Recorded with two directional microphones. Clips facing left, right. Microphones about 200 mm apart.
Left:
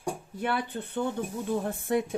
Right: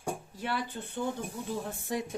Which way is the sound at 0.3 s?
60° left (ahead or behind).